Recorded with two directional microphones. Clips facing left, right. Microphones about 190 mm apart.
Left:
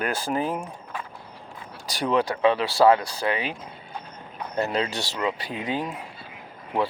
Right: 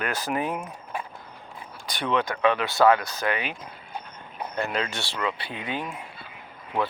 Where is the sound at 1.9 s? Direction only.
35° left (ahead or behind).